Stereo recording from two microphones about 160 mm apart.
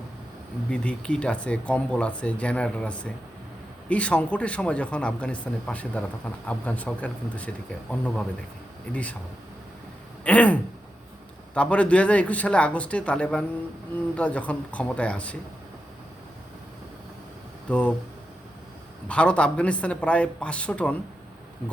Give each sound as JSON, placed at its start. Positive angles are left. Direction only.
{"t": 0.7, "sound": "speech", "side_deg": 5}
{"t": 10.2, "sound": "speech", "side_deg": 10}
{"t": 17.7, "sound": "speech", "side_deg": 10}
{"t": 19.0, "sound": "speech", "side_deg": 5}